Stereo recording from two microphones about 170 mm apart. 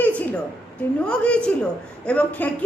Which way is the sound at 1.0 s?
5° left (ahead or behind).